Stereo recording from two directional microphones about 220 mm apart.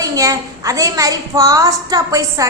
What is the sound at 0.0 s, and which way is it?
A woman's voice, 15° right (ahead or behind).